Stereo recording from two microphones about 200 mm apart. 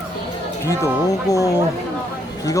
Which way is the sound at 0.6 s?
15° left (ahead or behind).